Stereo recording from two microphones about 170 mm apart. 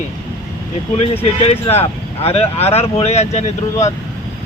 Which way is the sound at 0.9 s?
35° left (ahead or behind).